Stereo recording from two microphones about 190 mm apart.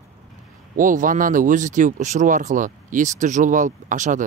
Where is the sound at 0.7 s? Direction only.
45° right (ahead or behind).